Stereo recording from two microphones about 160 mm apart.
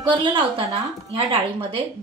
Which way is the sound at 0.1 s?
30° right (ahead or behind).